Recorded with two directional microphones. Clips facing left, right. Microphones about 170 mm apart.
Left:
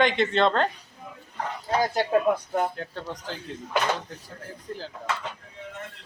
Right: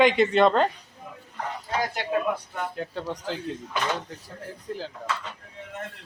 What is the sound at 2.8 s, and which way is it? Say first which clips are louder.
Speech: right 3 dB; 10° right (ahead or behind).